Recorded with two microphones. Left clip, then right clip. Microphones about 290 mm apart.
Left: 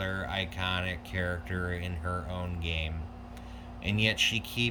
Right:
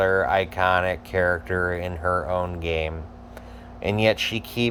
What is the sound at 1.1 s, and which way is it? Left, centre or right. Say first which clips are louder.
Speech: right 14 dB; right.